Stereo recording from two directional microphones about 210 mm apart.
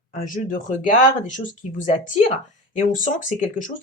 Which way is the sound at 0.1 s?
40° left (ahead or behind).